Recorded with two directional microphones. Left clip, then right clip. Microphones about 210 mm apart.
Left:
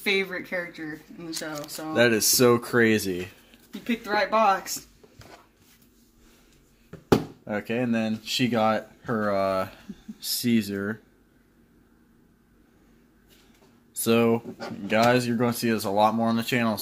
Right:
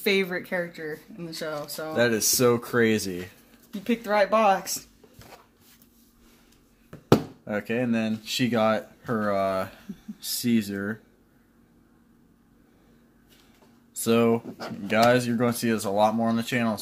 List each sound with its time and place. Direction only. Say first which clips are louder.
0.0 s speech: right 1 dB; 40° right (ahead or behind)
2.0 s speech: left 2 dB; 5° left (ahead or behind)
3.8 s speech: right 3 dB; 50° right (ahead or behind)
7.4 s speech: even; centre (ahead or behind)
13.9 s speech: even; centre (ahead or behind)